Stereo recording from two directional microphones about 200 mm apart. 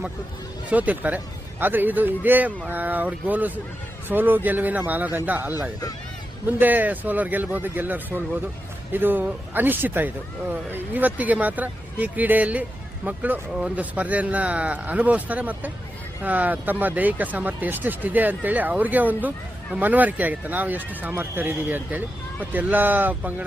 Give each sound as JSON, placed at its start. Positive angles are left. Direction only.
{"t": 0.7, "sound": "speech", "side_deg": -5}